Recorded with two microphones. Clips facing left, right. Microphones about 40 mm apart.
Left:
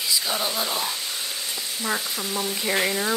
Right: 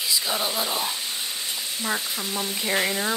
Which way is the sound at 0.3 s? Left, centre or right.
Centre.